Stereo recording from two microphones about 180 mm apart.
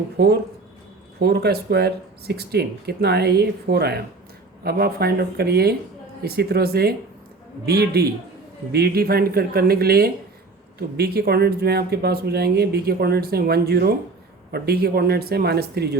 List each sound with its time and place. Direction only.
1.2 s speech: 65° right (ahead or behind)